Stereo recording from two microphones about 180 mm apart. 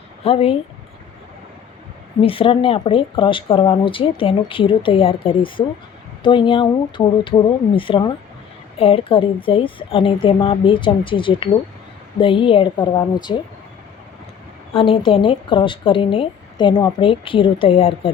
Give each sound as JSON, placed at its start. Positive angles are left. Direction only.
{"t": 0.3, "sound": "speech", "side_deg": 35}
{"t": 2.2, "sound": "speech", "side_deg": 30}
{"t": 14.8, "sound": "speech", "side_deg": 30}